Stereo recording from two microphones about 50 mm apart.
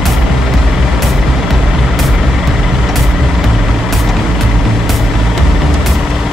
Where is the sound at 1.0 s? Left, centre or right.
Centre.